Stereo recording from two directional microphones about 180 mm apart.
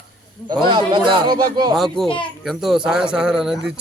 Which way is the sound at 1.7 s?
Centre (ahead or behind).